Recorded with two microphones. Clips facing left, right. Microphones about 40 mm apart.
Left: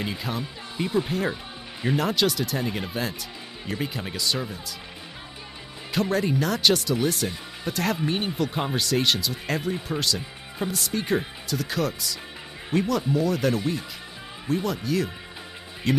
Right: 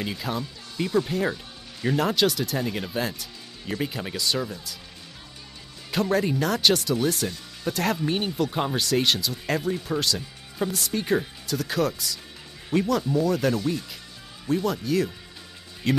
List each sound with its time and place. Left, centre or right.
0.0 s speech: centre
0.4 s speech: centre
1.3 s music: centre
2.0 s speech: centre
5.9 s speech: centre